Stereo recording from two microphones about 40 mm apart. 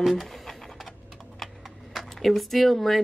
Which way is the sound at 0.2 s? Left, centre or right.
Centre.